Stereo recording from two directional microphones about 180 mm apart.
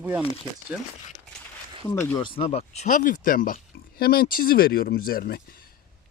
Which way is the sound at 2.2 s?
30° left (ahead or behind).